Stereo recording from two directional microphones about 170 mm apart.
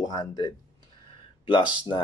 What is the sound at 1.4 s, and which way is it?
Speech, 30° left (ahead or behind).